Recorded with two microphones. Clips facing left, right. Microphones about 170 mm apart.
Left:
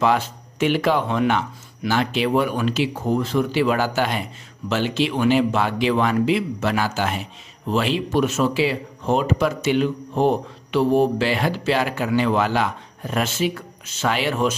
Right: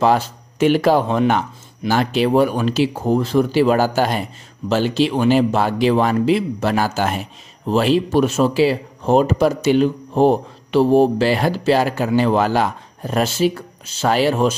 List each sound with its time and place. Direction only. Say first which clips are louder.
0.0 s speech: right 3 dB; 35° right (ahead or behind)